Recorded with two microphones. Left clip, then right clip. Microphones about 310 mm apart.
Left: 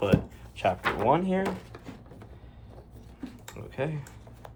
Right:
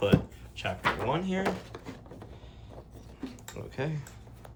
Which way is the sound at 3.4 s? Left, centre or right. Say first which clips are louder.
Left 3 dB; centre.